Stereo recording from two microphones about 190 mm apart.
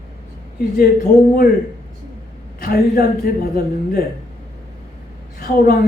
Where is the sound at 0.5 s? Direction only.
50° left (ahead or behind).